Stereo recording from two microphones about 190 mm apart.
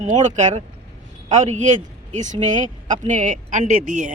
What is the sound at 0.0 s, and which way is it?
Speech, 40° right (ahead or behind).